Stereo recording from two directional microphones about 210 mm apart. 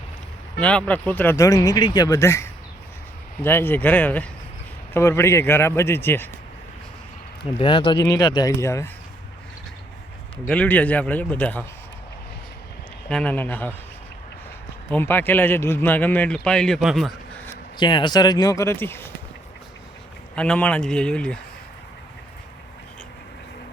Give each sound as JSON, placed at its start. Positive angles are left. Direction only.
{"t": 0.6, "sound": "a man's voice", "side_deg": 5}
{"t": 7.6, "sound": "speech", "side_deg": 25}
{"t": 10.4, "sound": "a man's voice", "side_deg": 5}
{"t": 13.1, "sound": "a man's voice", "side_deg": 5}
{"t": 14.8, "sound": "a man's voice", "side_deg": 10}
{"t": 17.7, "sound": "a man's voice", "side_deg": 20}
{"t": 20.3, "sound": "speech", "side_deg": 5}